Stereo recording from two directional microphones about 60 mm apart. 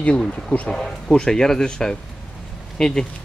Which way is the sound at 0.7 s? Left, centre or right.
Centre.